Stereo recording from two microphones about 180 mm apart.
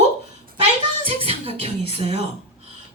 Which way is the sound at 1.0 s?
30° right (ahead or behind).